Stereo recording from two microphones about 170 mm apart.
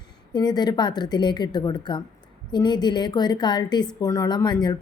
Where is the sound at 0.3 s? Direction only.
25° left (ahead or behind).